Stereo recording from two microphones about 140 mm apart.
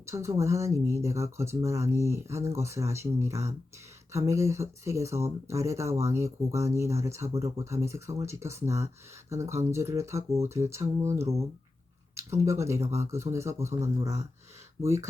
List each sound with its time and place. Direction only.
0.0 s speech: 20° right (ahead or behind)